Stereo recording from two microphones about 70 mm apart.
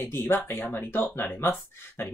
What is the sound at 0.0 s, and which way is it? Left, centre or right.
Speech, left.